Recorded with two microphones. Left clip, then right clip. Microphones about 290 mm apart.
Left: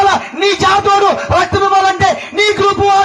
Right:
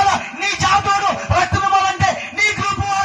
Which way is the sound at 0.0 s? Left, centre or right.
Centre.